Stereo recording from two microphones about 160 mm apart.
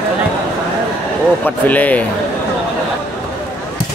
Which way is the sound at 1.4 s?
10° left (ahead or behind).